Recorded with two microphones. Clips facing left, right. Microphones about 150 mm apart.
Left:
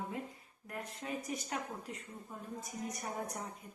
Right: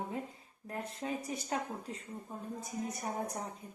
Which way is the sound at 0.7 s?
30° right (ahead or behind).